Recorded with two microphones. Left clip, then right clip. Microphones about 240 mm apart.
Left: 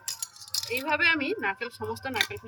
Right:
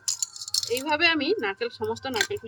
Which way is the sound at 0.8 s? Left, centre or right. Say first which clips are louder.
Right 1 dB; centre.